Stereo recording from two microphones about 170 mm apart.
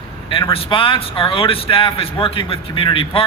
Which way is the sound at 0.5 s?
30° left (ahead or behind).